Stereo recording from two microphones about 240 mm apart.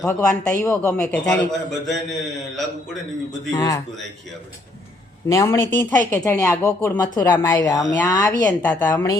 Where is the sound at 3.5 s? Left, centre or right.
Centre.